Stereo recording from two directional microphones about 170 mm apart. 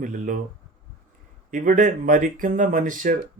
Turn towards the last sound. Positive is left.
turn(degrees=-50)  # may be behind; listen again after turning